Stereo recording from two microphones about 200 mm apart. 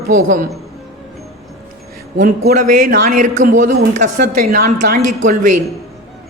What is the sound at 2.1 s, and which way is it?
A man's voice, 40° right (ahead or behind).